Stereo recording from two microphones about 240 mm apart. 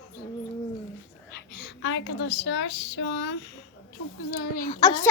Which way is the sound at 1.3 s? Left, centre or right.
Left.